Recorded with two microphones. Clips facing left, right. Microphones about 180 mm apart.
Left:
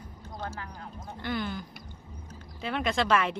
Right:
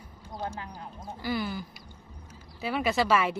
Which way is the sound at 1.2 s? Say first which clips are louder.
Right 1 dB; 5° right (ahead or behind).